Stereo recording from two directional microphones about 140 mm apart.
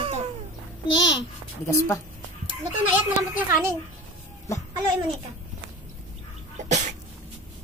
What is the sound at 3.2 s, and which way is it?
Speech, 20° right (ahead or behind).